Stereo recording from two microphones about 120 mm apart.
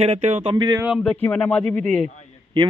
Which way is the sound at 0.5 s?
40° right (ahead or behind).